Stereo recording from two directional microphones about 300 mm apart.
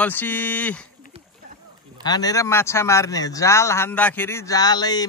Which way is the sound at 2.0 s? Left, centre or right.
Centre.